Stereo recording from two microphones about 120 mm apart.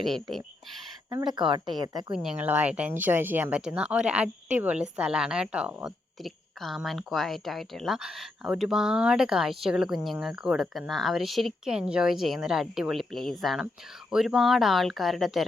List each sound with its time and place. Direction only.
0.0 s a woman's voice: centre (ahead or behind)
1.2 s speech: 40° right (ahead or behind)
2.1 s a woman's voice: 5° right (ahead or behind)